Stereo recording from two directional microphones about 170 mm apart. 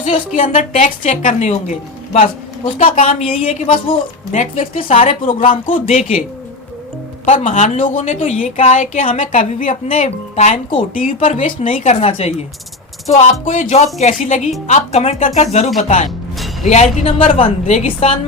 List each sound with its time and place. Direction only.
0.3 s a woman's voice: 50° left (ahead or behind); by 2.9 s 35° left (ahead or behind)
2.9 s a woman's voice: 50° left (ahead or behind)
3.2 s a woman's voice: 35° left (ahead or behind)
4.3 s a woman's voice: 50° left (ahead or behind)
4.9 s a woman's voice: 35° left (ahead or behind)
7.3 s a woman's voice: 50° left (ahead or behind); by 18.1 s 35° left (ahead or behind)